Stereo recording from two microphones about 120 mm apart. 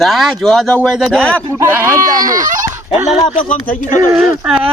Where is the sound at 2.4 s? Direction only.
90° right.